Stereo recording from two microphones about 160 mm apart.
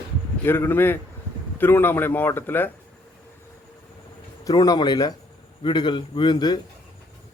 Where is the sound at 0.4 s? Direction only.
15° left (ahead or behind).